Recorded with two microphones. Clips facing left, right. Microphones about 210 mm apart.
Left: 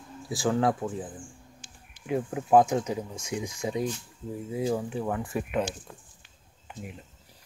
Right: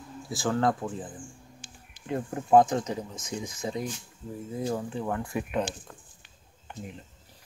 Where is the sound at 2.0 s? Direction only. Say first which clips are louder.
Left 1 dB; 5° left (ahead or behind).